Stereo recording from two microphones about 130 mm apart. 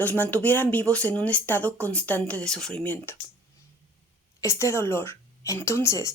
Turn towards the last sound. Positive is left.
turn(degrees=25)  # may be behind; listen again after turning